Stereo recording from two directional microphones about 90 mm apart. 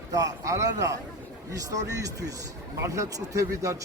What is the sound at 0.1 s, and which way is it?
Speech, 40° right (ahead or behind).